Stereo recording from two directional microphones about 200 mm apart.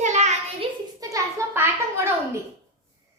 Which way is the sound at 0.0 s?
35° right (ahead or behind).